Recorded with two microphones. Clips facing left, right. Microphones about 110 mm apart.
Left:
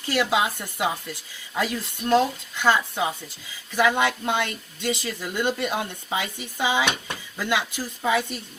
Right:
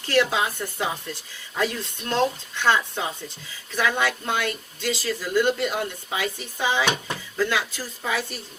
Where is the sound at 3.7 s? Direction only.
15° left (ahead or behind).